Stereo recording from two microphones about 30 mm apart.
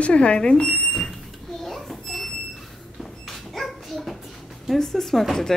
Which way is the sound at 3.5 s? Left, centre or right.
Centre.